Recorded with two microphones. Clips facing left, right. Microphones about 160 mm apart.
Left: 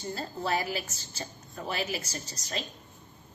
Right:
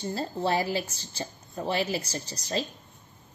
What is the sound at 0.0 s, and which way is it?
A woman's voice, 30° right (ahead or behind).